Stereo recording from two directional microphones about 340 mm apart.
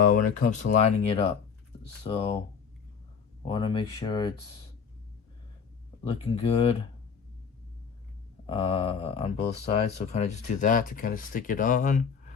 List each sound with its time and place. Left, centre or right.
0.0 s speech: left
3.4 s speech: centre
6.1 s speech: centre
8.4 s speech: centre